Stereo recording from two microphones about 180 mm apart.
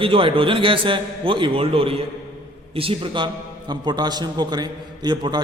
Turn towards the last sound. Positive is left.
turn(degrees=-25)  # may be behind; listen again after turning